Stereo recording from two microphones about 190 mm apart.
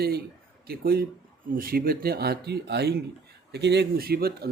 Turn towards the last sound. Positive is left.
turn(degrees=-55)  # may be behind; listen again after turning